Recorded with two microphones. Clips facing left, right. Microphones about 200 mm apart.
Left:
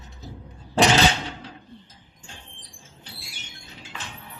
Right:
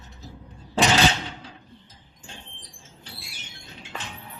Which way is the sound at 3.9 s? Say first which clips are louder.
Right 3 dB; 50° right (ahead or behind).